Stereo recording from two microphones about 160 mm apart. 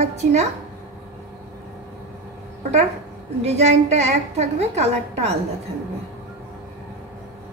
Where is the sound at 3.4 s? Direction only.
45° right (ahead or behind).